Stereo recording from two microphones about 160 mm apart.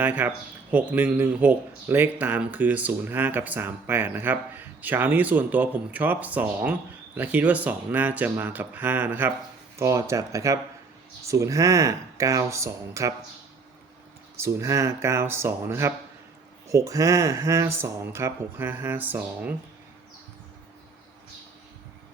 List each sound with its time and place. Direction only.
0.0 s speech: 10° right (ahead or behind)
14.3 s speech: 20° right (ahead or behind)